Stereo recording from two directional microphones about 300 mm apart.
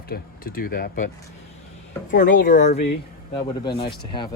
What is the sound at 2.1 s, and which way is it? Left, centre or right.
Speech, left.